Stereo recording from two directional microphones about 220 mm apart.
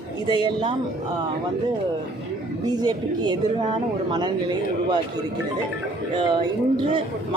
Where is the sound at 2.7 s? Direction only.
20° right (ahead or behind).